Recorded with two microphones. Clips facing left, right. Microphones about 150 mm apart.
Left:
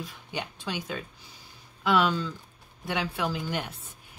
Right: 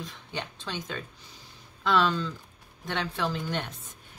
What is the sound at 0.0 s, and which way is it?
Speech, 10° left (ahead or behind).